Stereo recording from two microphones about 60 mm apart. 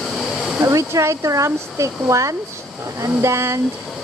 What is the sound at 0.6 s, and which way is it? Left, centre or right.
Speech, right.